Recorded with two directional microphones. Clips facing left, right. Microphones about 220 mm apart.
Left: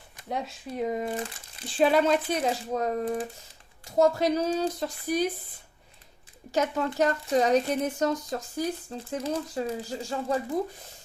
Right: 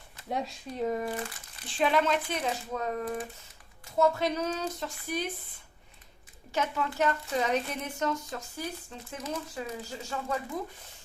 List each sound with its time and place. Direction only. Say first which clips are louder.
0.3 s speech: even; centre (ahead or behind)
0.8 s speech: left 1 dB; 20° left (ahead or behind)
1.8 s speech: left 5 dB; 35° left (ahead or behind)
6.5 s speech: left 5 dB; 40° left (ahead or behind)